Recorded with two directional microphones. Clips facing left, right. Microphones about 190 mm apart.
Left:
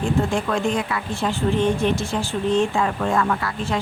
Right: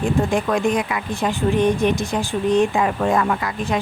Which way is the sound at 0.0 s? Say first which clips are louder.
Right 2 dB; 15° right (ahead or behind).